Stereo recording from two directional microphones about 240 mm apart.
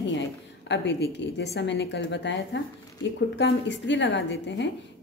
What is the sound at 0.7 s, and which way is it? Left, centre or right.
Speech, left.